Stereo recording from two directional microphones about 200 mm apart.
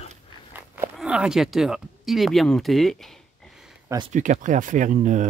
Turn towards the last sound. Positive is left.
turn(degrees=-40)  # may be behind; listen again after turning